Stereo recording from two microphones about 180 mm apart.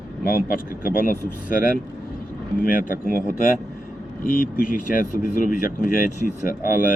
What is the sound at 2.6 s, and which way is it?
Speech, 50° left (ahead or behind).